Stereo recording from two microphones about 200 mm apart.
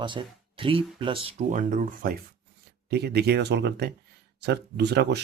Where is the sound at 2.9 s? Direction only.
55° right (ahead or behind).